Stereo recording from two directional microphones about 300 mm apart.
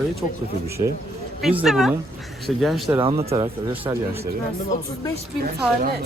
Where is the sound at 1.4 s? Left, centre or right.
Centre.